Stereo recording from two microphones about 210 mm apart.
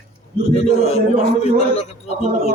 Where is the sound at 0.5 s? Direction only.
30° left (ahead or behind).